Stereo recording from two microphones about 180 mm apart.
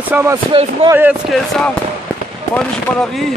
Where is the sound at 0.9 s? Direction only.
10° right (ahead or behind).